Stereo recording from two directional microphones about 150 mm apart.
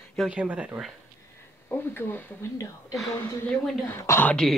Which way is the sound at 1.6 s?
15° left (ahead or behind).